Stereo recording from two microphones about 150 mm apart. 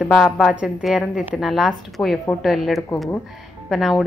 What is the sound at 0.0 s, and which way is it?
A woman's voice, centre (ahead or behind).